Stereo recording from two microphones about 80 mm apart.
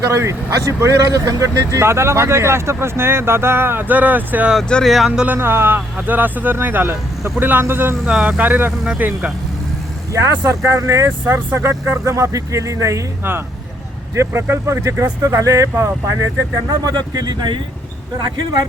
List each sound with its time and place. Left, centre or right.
0.1 s speech: right
4.7 s speech: centre
5.2 s speech: right
8.0 s speech: centre
10.2 s speech: right
14.2 s speech: right
16.8 s speech: right